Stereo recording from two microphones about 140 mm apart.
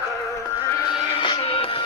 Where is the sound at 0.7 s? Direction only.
30° left (ahead or behind).